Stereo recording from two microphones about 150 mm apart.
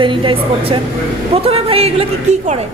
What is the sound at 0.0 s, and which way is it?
A woman's voice, 35° right (ahead or behind).